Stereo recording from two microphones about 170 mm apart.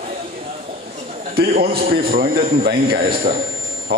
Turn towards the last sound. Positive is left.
turn(degrees=-60)  # may be behind; listen again after turning